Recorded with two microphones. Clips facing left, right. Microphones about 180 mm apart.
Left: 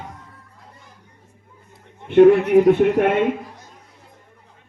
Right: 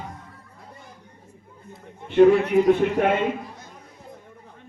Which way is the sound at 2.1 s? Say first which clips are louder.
Left 4 dB; 60° left (ahead or behind).